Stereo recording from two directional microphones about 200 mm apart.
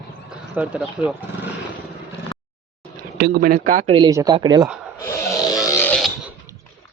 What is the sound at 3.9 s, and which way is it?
Speech, 20° right (ahead or behind).